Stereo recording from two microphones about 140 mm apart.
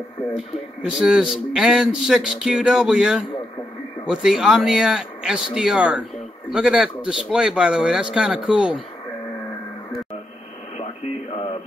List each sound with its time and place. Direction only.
0.3 s speech: 5° right (ahead or behind)
10.8 s radio: 45° left (ahead or behind)